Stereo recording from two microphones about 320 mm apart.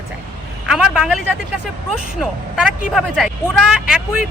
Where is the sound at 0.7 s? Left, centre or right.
Centre.